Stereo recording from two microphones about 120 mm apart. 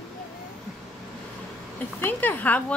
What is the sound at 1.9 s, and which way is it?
Speech, 15° left (ahead or behind).